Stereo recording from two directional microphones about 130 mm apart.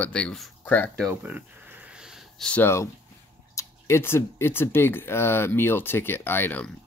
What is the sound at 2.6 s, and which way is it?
Speech, 20° left (ahead or behind).